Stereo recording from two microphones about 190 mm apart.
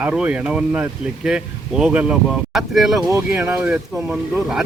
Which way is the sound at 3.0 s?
10° right (ahead or behind).